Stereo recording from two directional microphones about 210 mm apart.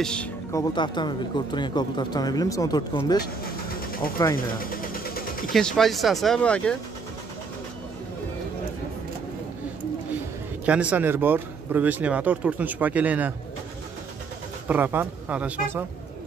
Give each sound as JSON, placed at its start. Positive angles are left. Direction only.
{"t": 0.0, "sound": "speech", "side_deg": 5}
{"t": 4.0, "sound": "speech", "side_deg": 45}
{"t": 4.6, "sound": "vehicle", "side_deg": 40}
{"t": 5.5, "sound": "speech", "side_deg": 0}
{"t": 10.6, "sound": "speech", "side_deg": -5}
{"t": 14.7, "sound": "speech", "side_deg": -10}